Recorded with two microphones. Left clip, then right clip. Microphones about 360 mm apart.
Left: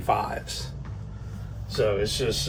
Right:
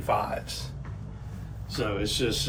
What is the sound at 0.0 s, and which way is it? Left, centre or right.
Speech, left.